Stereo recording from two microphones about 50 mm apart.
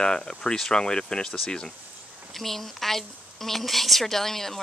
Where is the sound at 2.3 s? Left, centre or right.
Centre.